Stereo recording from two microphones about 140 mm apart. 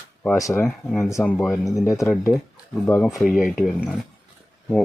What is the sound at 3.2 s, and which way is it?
Speech, centre (ahead or behind).